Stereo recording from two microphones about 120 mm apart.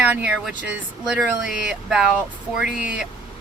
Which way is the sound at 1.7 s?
5° right (ahead or behind).